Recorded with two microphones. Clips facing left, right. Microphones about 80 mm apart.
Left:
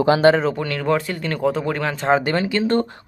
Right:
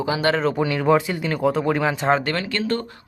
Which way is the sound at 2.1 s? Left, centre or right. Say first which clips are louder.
Left 3 dB; centre.